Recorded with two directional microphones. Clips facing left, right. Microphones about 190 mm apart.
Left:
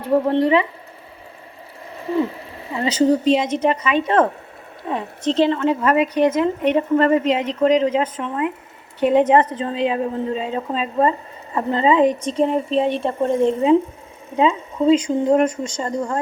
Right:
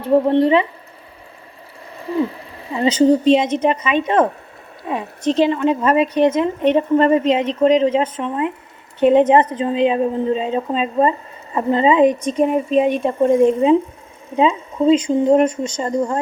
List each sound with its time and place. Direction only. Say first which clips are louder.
0.3 s speech: right 1 dB; 20° right (ahead or behind)
2.7 s a woman's voice: right 3 dB; 20° right (ahead or behind)
5.8 s a woman's voice: right 2 dB; 25° right (ahead or behind)